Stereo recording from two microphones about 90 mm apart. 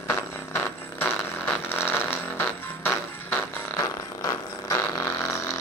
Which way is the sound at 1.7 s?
25° left (ahead or behind).